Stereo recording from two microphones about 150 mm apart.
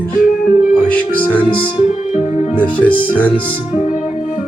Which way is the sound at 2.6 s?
10° left (ahead or behind).